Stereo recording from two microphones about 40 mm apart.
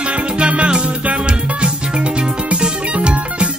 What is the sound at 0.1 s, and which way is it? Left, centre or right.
Music, right.